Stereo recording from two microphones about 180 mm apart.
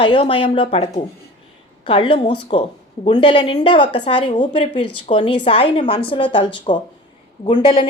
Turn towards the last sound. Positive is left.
turn(degrees=30)  # may be behind; listen again after turning